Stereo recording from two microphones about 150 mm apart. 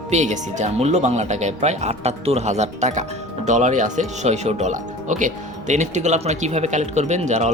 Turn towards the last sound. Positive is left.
turn(degrees=-50)  # may be behind; listen again after turning